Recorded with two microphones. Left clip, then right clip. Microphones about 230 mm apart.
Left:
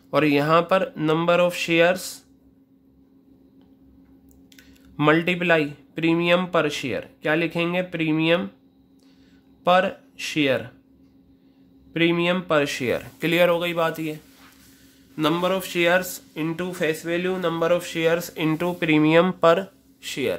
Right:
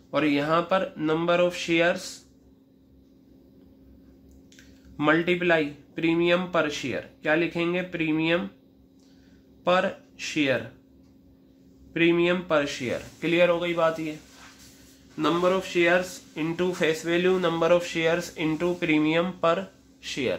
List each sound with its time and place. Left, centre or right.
0.1 s speech: left
4.6 s speech: left
9.7 s speech: left
11.9 s speech: left
15.1 s speech: left
16.3 s speech: centre; by 19.6 s left
20.0 s speech: left